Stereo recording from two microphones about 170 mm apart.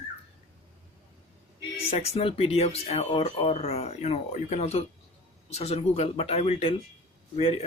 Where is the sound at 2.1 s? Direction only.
35° left (ahead or behind).